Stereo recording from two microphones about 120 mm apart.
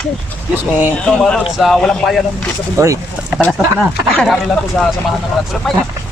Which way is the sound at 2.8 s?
25° right (ahead or behind).